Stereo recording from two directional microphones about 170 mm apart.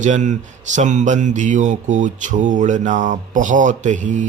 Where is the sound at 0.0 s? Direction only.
45° right (ahead or behind).